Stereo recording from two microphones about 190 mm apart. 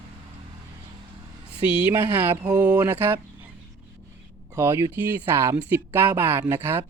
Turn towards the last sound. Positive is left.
turn(degrees=-10)  # may be behind; listen again after turning